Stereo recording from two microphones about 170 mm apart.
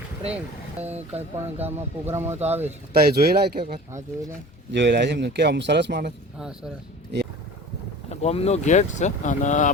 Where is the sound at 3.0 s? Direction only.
65° right (ahead or behind).